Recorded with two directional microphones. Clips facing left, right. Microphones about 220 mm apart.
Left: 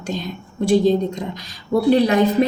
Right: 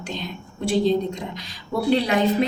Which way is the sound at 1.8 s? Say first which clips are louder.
Left 5 dB; 45° left (ahead or behind).